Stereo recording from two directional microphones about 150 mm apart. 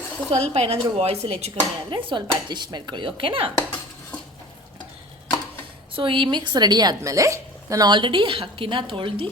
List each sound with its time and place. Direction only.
0.3 s speech: 45° right (ahead or behind)
5.9 s speech: 35° right (ahead or behind)